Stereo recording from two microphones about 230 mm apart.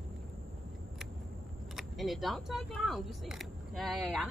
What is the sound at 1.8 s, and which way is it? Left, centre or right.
Speech, centre.